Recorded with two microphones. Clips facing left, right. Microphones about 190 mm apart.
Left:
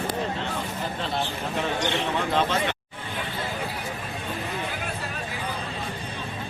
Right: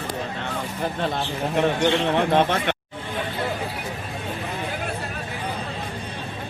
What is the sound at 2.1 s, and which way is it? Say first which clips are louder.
Speech: right 5 dB; 60° right (ahead or behind).